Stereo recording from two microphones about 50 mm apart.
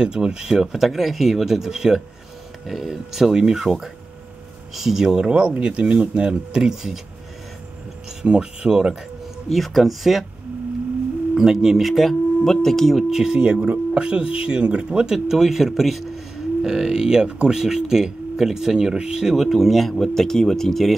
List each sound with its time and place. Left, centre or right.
0.0 s speech: centre
8.3 s speech: centre
9.5 s speech: centre
11.3 s speech: centre
13.1 s speech: centre
13.6 s speech: right
15.1 s speech: centre